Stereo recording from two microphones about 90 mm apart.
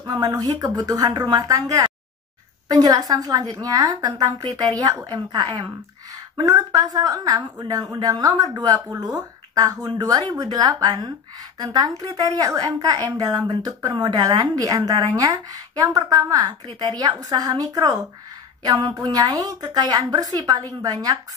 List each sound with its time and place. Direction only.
0.0 s speech: 45° right (ahead or behind)